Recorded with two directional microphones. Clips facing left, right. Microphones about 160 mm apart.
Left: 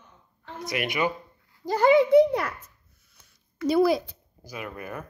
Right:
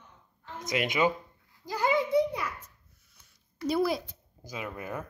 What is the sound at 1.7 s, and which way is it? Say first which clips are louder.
Speech: left 9 dB; 70° left (ahead or behind).